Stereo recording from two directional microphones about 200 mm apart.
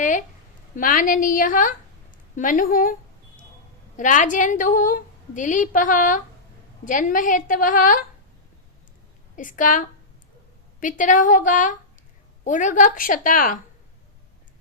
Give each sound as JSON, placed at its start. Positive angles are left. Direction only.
{"t": 0.0, "sound": "a sound", "side_deg": 40}
{"t": 0.8, "sound": "a woman's voice", "side_deg": 45}
{"t": 3.9, "sound": "a woman's voice", "side_deg": 40}
{"t": 9.3, "sound": "a woman's voice", "side_deg": 40}